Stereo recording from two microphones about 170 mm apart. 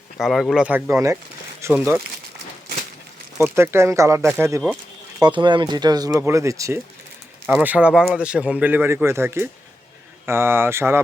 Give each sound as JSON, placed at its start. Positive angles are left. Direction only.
{"t": 0.2, "sound": "speech", "side_deg": 0}
{"t": 3.3, "sound": "speech", "side_deg": -15}
{"t": 5.2, "sound": "speech", "side_deg": -25}